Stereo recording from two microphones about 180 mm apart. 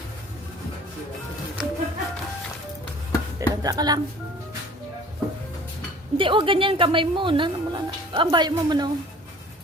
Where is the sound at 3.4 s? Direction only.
20° right (ahead or behind).